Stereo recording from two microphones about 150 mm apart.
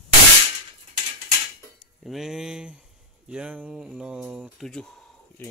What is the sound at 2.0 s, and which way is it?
Speech, centre (ahead or behind).